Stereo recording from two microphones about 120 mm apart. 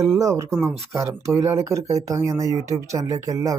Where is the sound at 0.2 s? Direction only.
25° right (ahead or behind).